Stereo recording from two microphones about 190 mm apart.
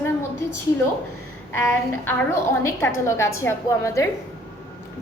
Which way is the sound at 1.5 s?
10° left (ahead or behind).